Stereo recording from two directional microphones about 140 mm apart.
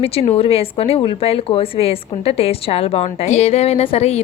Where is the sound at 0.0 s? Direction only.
45° left (ahead or behind).